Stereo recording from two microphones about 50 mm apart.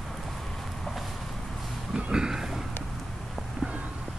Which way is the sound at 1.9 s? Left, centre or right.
Centre.